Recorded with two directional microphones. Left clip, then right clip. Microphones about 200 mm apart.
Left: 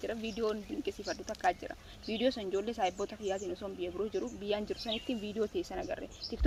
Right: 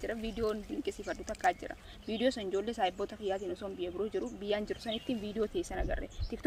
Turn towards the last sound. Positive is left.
turn(degrees=0)  # may be behind; listen again after turning